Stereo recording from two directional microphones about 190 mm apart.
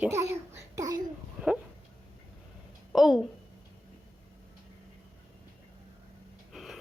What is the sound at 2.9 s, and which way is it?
Speech, centre (ahead or behind).